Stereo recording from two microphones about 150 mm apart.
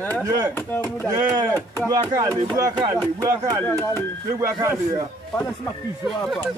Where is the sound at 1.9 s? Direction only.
25° right (ahead or behind).